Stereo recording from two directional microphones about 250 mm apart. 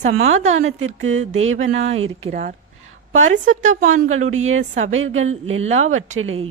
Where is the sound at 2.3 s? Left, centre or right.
Right.